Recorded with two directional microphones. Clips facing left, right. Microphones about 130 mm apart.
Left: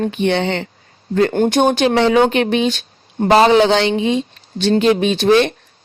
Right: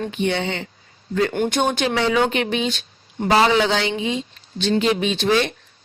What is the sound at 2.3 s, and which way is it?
Speech, 60° left (ahead or behind).